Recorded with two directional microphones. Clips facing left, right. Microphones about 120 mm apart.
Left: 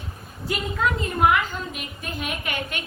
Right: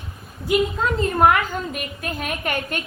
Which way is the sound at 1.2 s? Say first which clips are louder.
Right 2 dB; 50° right (ahead or behind).